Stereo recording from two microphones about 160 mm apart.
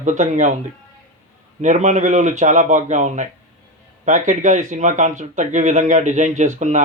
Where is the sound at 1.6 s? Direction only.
50° right (ahead or behind).